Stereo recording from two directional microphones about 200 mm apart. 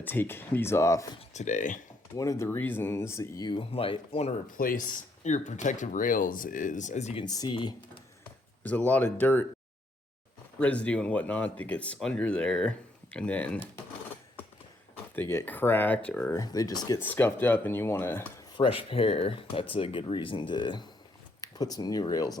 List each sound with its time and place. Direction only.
0.0 s speech: 10° left (ahead or behind)
1.3 s speech: 35° left (ahead or behind)
2.1 s speech: 15° left (ahead or behind)
4.5 s speech: 45° left (ahead or behind)
7.3 s speech: 20° left (ahead or behind)
8.2 s speech: 10° left (ahead or behind)
10.6 s speech: 5° left (ahead or behind)
15.1 s speech: 10° left (ahead or behind)
18.5 s speech: 25° left (ahead or behind)